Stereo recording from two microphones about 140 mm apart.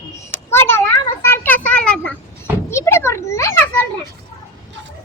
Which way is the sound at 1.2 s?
15° left (ahead or behind).